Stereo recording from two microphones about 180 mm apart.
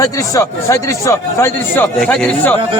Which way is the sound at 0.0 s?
20° left (ahead or behind).